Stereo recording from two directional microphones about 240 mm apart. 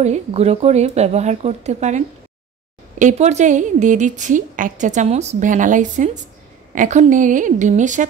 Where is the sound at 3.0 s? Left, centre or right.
Right.